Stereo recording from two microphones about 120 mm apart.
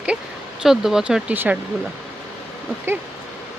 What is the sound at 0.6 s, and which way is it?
Speech, 5° right (ahead or behind).